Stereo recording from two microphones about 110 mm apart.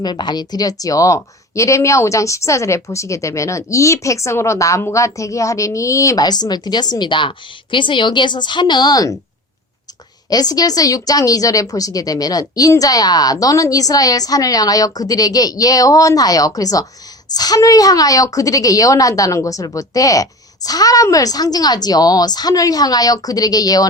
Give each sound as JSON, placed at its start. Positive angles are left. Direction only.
{"t": 0.0, "sound": "speech", "side_deg": 40}
{"t": 10.2, "sound": "a woman's voice", "side_deg": 35}